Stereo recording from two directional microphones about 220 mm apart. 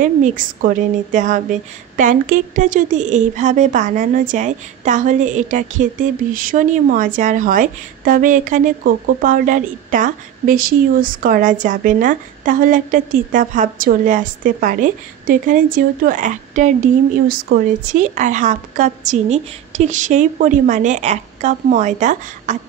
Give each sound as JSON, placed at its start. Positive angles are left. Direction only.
{"t": 0.0, "sound": "a woman's voice", "side_deg": -35}